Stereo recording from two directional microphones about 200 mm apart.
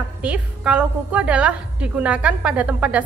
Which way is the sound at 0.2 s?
5° right (ahead or behind).